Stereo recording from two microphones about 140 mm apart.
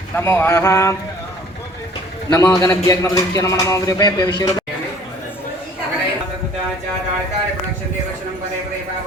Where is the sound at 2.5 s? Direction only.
25° left (ahead or behind).